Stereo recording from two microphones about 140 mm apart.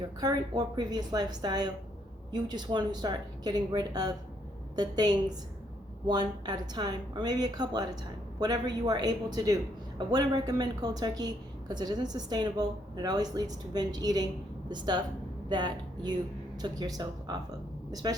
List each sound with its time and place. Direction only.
0.2 s a woman's voice: 30° right (ahead or behind)